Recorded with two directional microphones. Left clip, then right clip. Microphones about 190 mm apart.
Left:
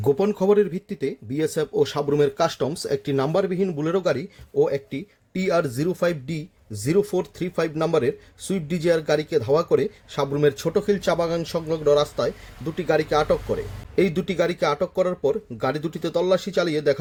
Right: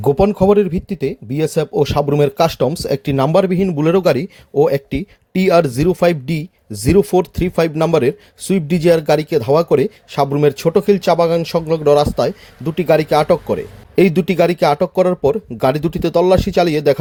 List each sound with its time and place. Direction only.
0.0 s speech: 30° right (ahead or behind)